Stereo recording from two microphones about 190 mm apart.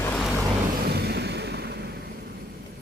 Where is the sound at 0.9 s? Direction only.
60° right (ahead or behind).